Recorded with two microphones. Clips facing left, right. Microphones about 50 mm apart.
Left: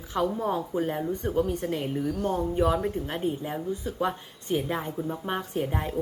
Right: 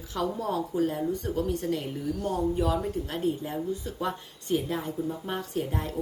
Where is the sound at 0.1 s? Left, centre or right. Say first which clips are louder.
Left 3 dB; left.